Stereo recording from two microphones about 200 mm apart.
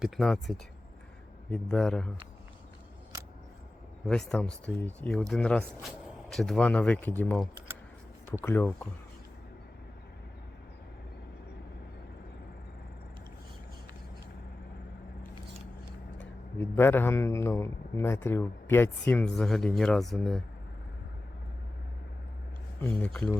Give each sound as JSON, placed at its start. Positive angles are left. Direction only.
{"t": 0.0, "sound": "speech", "side_deg": 0}
{"t": 1.7, "sound": "speech", "side_deg": 5}
{"t": 4.0, "sound": "speech", "side_deg": 5}
{"t": 16.6, "sound": "speech", "side_deg": 10}
{"t": 22.8, "sound": "speech", "side_deg": 5}